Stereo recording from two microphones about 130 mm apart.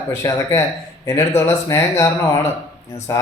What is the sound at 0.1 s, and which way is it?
Speech, 20° left (ahead or behind).